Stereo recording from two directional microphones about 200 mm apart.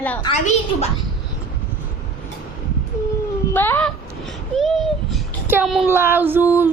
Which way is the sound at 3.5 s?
10° left (ahead or behind).